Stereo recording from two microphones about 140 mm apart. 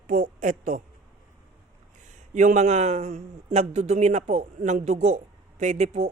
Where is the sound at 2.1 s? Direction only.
60° right (ahead or behind).